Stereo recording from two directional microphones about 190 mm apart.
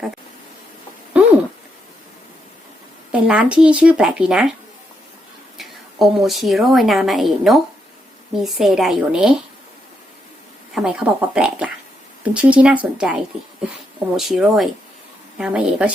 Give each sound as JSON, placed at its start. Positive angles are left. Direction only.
{"t": 1.1, "sound": "a sound", "side_deg": -5}
{"t": 3.1, "sound": "speech", "side_deg": -5}
{"t": 5.5, "sound": "a woman's voice", "side_deg": 0}
{"t": 10.8, "sound": "speech", "side_deg": -5}